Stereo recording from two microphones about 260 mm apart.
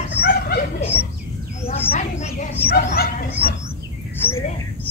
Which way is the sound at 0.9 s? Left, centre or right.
Left.